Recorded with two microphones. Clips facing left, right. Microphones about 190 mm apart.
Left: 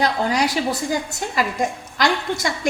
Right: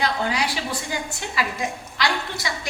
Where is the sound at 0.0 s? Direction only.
40° left (ahead or behind).